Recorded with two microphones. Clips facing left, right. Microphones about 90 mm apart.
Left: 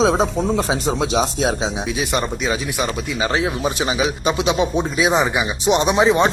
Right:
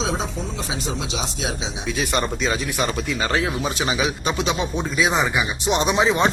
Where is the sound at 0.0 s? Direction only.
50° left (ahead or behind).